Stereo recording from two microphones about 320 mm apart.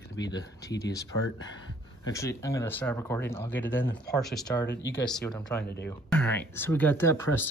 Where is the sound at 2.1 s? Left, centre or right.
Centre.